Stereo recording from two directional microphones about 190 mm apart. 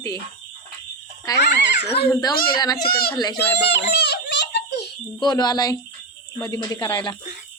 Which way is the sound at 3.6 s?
65° left (ahead or behind).